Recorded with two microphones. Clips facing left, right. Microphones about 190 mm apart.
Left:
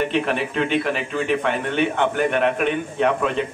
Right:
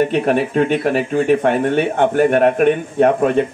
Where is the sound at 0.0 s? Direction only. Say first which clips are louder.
Right 6 dB; 45° right (ahead or behind).